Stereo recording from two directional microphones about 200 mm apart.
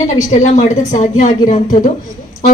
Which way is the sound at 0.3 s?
35° left (ahead or behind).